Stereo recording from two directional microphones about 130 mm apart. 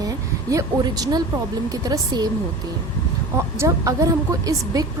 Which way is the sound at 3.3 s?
25° right (ahead or behind).